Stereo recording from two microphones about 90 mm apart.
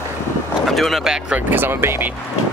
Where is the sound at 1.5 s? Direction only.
25° right (ahead or behind).